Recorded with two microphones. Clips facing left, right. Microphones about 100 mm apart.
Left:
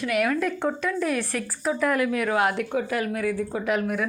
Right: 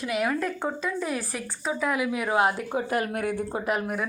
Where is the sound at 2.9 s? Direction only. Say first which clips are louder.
Right 1 dB; 45° right (ahead or behind).